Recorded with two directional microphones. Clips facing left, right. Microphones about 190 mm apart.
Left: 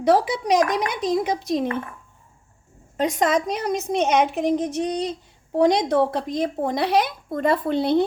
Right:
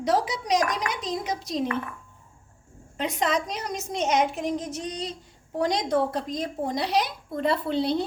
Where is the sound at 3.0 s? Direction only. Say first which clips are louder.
Left 5 dB; 45° left (ahead or behind).